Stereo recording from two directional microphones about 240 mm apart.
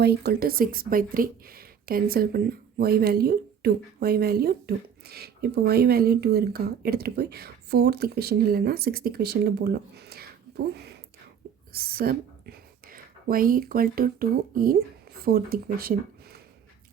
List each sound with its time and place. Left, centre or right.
0.0 s speech: right
11.7 s speech: right